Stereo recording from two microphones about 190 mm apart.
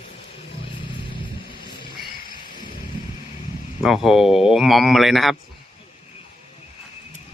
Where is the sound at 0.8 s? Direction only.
25° left (ahead or behind).